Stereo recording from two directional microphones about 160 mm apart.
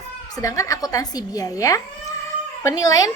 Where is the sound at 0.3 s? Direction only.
20° left (ahead or behind).